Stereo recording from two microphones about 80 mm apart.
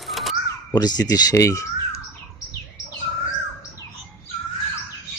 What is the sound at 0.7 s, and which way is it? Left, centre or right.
Speech, left.